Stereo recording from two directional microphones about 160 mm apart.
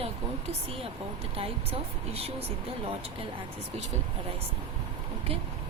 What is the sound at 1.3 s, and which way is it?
Speech, 35° right (ahead or behind).